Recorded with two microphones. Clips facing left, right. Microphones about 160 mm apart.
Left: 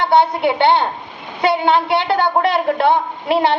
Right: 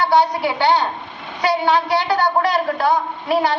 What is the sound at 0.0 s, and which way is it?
A woman's voice, 25° left (ahead or behind).